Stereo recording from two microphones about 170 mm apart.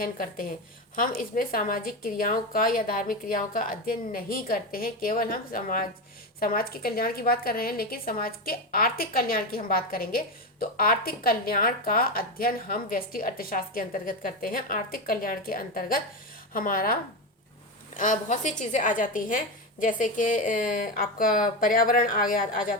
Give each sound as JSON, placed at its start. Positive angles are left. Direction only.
{"t": 0.0, "sound": "a woman's voice", "side_deg": 55}